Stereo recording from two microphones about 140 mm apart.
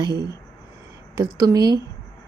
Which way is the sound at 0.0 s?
25° right (ahead or behind).